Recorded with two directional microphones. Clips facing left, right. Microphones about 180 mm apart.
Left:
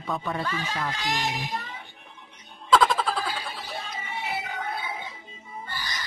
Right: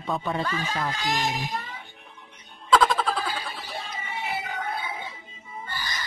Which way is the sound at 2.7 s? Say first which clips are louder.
Even; centre (ahead or behind).